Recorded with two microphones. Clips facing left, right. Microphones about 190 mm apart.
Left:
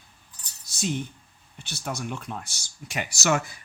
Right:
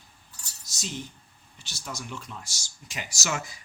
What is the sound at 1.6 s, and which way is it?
Speech, 60° left (ahead or behind).